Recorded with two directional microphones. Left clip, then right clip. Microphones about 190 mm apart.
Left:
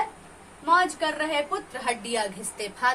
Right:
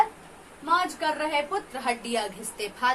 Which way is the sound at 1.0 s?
10° right (ahead or behind).